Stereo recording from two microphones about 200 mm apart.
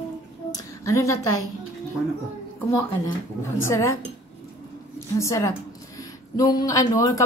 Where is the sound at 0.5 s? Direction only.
15° left (ahead or behind).